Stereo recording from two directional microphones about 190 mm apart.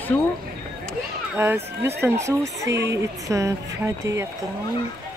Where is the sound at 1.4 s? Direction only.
15° right (ahead or behind).